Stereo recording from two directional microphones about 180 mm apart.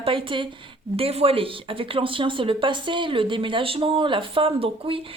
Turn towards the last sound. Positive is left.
turn(degrees=-30)  # may be behind; listen again after turning